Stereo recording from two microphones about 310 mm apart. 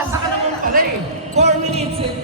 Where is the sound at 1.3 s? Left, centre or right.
Right.